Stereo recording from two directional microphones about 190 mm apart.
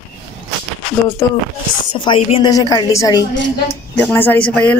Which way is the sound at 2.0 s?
25° left (ahead or behind).